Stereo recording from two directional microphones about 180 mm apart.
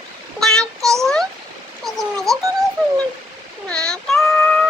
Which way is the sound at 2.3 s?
20° right (ahead or behind).